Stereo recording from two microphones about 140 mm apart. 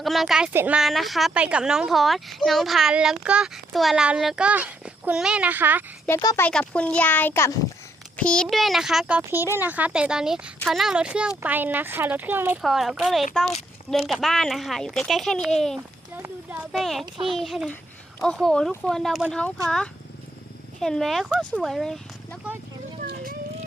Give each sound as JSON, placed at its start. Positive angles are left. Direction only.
{"t": 0.0, "sound": "a woman's voice", "side_deg": 0}
{"t": 0.8, "sound": "a woman's voice", "side_deg": 0}
{"t": 6.1, "sound": "speech", "side_deg": 15}
{"t": 6.5, "sound": "a woman's voice", "side_deg": 5}
{"t": 12.6, "sound": "a woman's voice", "side_deg": 0}
{"t": 16.1, "sound": "a sound", "side_deg": -15}
{"t": 16.7, "sound": "a woman's voice", "side_deg": 0}